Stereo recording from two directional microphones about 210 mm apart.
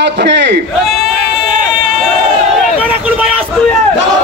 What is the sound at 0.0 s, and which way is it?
Speech, 55° right (ahead or behind).